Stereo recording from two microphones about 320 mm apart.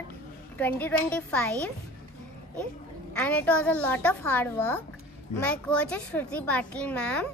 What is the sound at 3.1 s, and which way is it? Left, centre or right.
A child's voice, centre.